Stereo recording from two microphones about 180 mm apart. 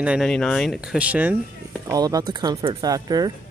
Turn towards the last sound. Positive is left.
turn(degrees=-20)  # may be behind; listen again after turning